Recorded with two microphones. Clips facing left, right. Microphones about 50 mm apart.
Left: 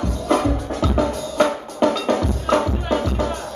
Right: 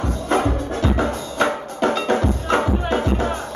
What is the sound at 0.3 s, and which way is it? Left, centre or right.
Music, right.